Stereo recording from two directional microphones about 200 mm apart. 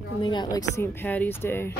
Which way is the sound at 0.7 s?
10° left (ahead or behind).